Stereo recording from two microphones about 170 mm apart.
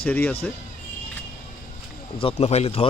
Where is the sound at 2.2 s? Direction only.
35° left (ahead or behind).